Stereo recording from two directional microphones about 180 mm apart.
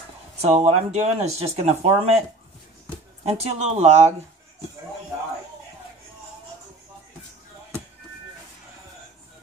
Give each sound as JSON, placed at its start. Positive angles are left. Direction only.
{"t": 0.4, "sound": "speech", "side_deg": -35}
{"t": 3.3, "sound": "speech", "side_deg": -35}